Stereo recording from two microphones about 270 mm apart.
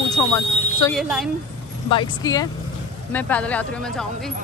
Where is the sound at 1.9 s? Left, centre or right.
Centre.